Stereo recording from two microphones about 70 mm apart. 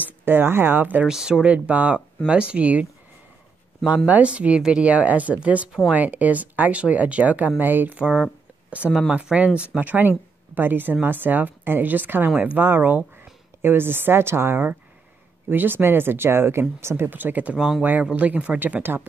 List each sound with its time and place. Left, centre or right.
0.0 s speech: right
1.0 s speech: centre; by 8.0 s right
8.0 s speech: centre
8.6 s a sound: centre
9.1 s speech: centre
18.8 s speech: right